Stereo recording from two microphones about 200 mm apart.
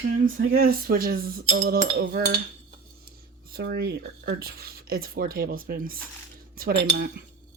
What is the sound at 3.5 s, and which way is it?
Speech, 50° right (ahead or behind).